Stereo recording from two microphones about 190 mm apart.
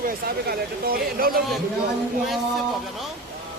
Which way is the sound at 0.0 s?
55° right (ahead or behind).